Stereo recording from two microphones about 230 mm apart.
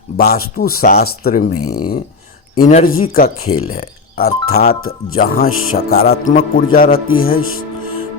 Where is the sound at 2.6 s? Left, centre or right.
Left.